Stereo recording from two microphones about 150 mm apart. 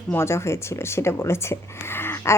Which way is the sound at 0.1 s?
15° left (ahead or behind).